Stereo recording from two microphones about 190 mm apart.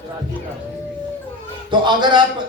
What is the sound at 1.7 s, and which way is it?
Speech, 25° right (ahead or behind).